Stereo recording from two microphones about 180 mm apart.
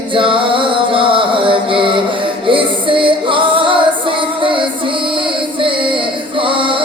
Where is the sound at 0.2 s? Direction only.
30° right (ahead or behind).